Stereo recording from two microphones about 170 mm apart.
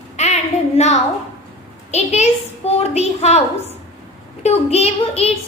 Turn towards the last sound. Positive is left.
turn(degrees=35)  # may be behind; listen again after turning